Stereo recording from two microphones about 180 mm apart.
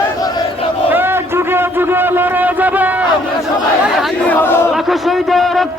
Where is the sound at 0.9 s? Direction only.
10° right (ahead or behind).